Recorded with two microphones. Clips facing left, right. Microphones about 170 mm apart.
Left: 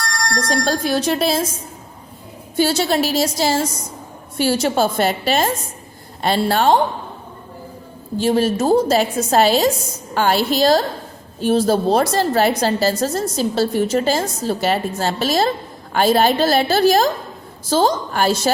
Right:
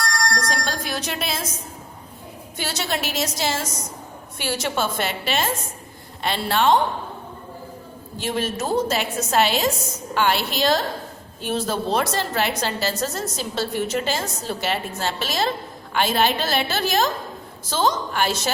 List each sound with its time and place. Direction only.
0.3 s speech: 30° left (ahead or behind)
2.6 s a woman's voice: 30° left (ahead or behind)
8.2 s a woman's voice: 35° left (ahead or behind)